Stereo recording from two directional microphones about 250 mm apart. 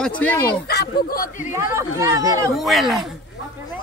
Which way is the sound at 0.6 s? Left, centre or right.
Left.